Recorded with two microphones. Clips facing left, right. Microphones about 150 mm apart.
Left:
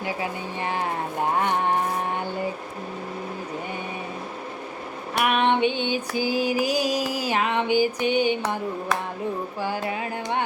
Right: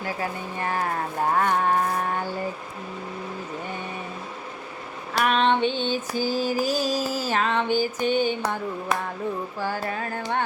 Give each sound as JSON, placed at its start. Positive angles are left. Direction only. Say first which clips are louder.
{"t": 0.0, "sound": "speech", "louder": "left 1 dB", "side_deg": 20}
{"t": 1.4, "sound": "a sound", "louder": "right 2 dB", "side_deg": 20}
{"t": 5.2, "sound": "music", "louder": "even", "side_deg": 15}
{"t": 9.6, "sound": "music", "louder": "left 1 dB", "side_deg": 15}